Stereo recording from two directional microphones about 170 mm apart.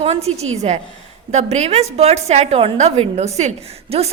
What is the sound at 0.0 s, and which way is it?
A woman's voice, 40° right (ahead or behind).